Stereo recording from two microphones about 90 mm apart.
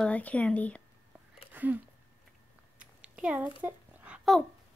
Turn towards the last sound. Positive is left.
turn(degrees=-20)  # may be behind; listen again after turning